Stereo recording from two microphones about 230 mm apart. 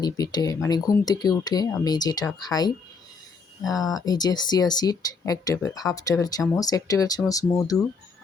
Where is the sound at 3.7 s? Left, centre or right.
Centre.